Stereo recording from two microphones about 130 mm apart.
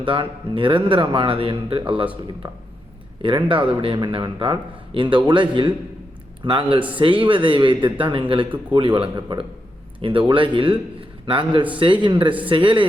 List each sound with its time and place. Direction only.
0.0 s speech: 40° right (ahead or behind)